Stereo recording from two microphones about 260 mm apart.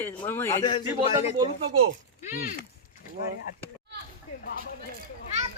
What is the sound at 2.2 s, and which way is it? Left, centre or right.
Speech, left.